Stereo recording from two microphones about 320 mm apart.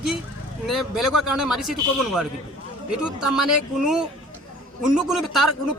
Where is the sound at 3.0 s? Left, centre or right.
Centre.